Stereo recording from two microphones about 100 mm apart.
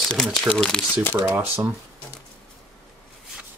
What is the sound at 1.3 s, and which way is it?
Speech, 20° right (ahead or behind).